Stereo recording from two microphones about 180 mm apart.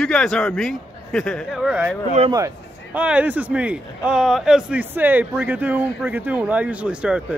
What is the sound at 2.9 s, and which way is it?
Speech, 5° right (ahead or behind).